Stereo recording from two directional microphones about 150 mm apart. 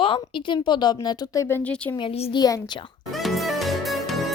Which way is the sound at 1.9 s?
35° left (ahead or behind).